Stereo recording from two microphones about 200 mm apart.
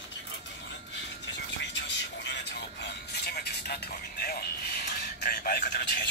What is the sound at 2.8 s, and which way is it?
Music, 55° left (ahead or behind).